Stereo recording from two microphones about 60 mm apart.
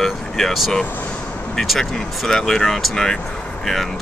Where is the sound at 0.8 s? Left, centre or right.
Left.